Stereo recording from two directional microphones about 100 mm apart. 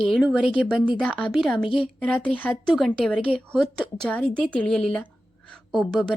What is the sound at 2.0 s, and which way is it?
Speech, 10° left (ahead or behind).